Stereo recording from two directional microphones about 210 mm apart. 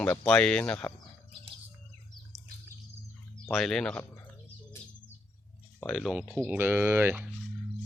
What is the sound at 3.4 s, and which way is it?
Speech, centre (ahead or behind).